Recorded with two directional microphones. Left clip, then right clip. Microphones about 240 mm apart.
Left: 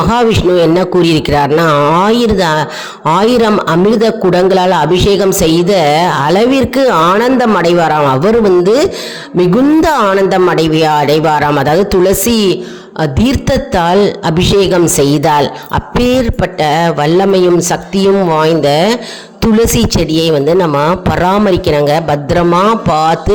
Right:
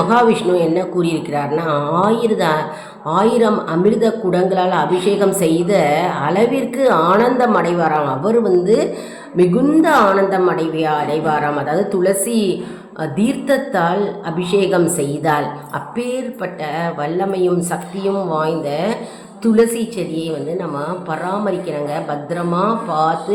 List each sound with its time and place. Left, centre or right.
0.1 s a man's voice: left
9.8 s a man's voice: left